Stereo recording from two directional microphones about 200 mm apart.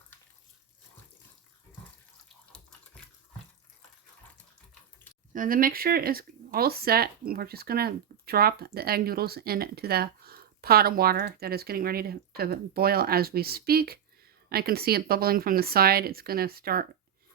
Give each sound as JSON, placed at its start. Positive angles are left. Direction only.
{"t": 5.3, "sound": "speech", "side_deg": -45}